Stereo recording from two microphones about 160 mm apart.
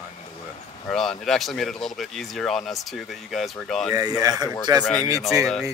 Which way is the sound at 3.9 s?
20° right (ahead or behind).